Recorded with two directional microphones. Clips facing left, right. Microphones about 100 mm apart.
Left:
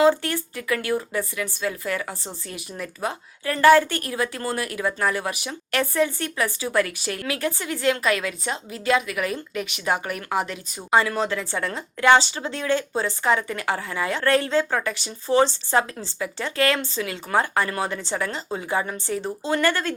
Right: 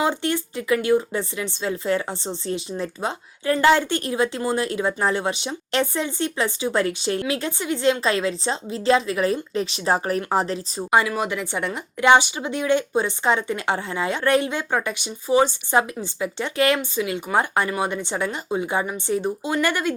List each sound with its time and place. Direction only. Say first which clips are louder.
0.0 s a woman's voice: left 4 dB; 20° right (ahead or behind)
10.9 s speech: even; 15° right (ahead or behind)